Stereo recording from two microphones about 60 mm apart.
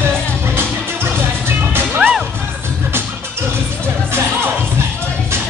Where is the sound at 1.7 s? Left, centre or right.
Right.